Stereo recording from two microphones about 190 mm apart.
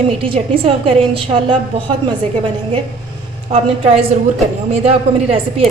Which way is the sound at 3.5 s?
30° right (ahead or behind).